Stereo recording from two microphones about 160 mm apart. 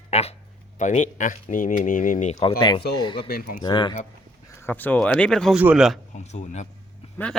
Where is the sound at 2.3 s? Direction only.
30° left (ahead or behind).